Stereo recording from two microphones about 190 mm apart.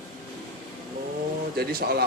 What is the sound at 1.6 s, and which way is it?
Speech, 55° right (ahead or behind).